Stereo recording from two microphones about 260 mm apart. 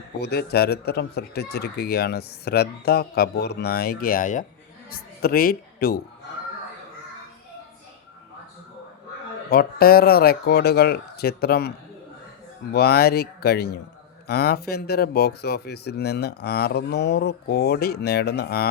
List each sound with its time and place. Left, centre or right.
0.2 s a woman's voice: left
9.5 s speech: left
12.7 s speech: left